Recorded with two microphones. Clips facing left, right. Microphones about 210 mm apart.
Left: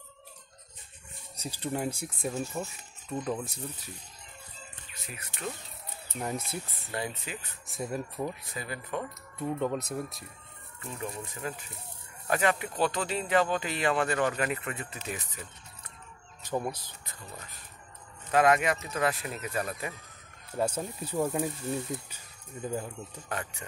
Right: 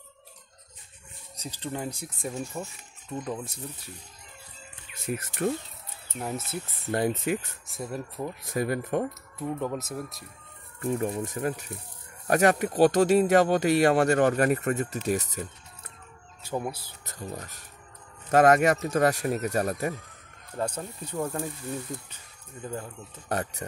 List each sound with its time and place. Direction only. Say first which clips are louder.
1.6 s speech: left 1 dB; 10° left (ahead or behind)
2.2 s speech: even; centre (ahead or behind)
5.1 s speech: right 11 dB; 45° right (ahead or behind)
6.1 s speech: right 1 dB; centre (ahead or behind)
6.9 s speech: right 11 dB; 50° right (ahead or behind)
7.6 s speech: even; centre (ahead or behind)
8.5 s speech: right 10 dB; 50° right (ahead or behind)
9.4 s speech: even; centre (ahead or behind)
10.8 s speech: right 10 dB; 45° right (ahead or behind)
17.0 s speech: right 13 dB; 45° right (ahead or behind)
20.5 s speech: left 1 dB; 10° left (ahead or behind)
23.2 s speech: right 8 dB; 40° right (ahead or behind)